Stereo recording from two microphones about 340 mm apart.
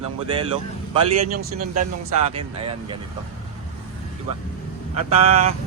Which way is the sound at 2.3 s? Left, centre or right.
Centre.